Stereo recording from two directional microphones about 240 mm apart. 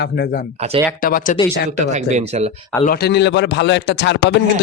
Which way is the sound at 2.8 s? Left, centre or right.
Left.